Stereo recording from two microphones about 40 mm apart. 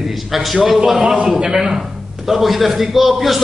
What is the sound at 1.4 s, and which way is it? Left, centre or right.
A man's voice, centre.